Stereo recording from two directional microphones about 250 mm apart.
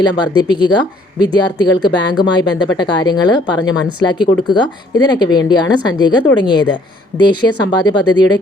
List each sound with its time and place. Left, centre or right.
0.0 s speech: centre